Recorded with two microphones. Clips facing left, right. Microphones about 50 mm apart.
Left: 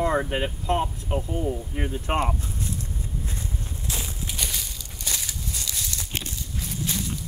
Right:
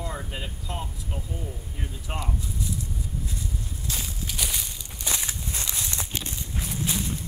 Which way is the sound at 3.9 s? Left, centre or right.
Left.